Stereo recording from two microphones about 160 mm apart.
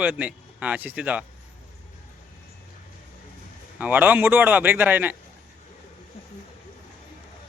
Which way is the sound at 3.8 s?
10° right (ahead or behind).